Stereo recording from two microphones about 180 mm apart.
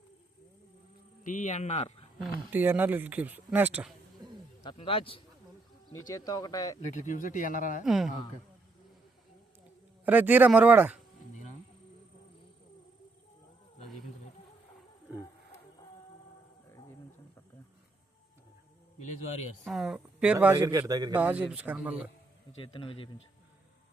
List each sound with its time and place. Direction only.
1.2 s speech: 45° left (ahead or behind)
2.5 s speech: 10° right (ahead or behind)
4.6 s speech: 30° left (ahead or behind)
7.1 s a man's voice: 45° left (ahead or behind)
7.9 s speech: centre (ahead or behind)
10.1 s speech: 10° right (ahead or behind)
18.9 s speech: 40° left (ahead or behind)
19.6 s speech: centre (ahead or behind)
20.7 s a man's voice: 20° right (ahead or behind)
21.2 s speech: 10° right (ahead or behind)
22.5 s speech: 30° left (ahead or behind)